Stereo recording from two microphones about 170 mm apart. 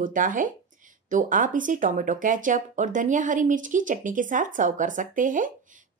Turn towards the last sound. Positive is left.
turn(degrees=-50)  # may be behind; listen again after turning